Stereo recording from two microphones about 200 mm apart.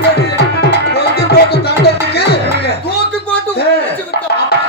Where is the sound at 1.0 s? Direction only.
55° left (ahead or behind).